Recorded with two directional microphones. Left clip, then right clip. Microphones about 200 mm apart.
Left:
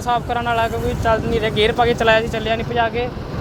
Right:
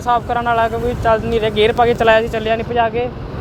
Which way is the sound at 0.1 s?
15° right (ahead or behind).